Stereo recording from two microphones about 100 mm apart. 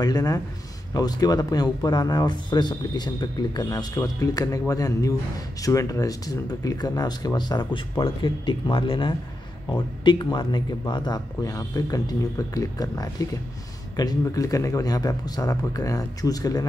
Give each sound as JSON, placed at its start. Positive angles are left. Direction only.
{"t": 0.0, "sound": "speech", "side_deg": 40}
{"t": 8.0, "sound": "speech", "side_deg": 55}